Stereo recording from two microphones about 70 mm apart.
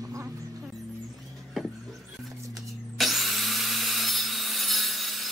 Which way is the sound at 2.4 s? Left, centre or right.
Right.